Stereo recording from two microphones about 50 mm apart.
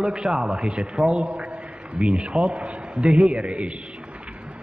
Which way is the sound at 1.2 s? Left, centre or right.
Right.